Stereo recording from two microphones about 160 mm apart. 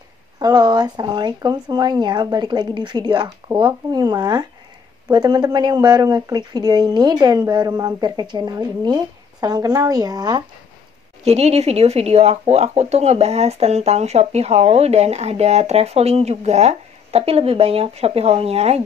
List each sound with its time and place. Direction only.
0.4 s speech: 25° right (ahead or behind)
11.2 s speech: 40° right (ahead or behind)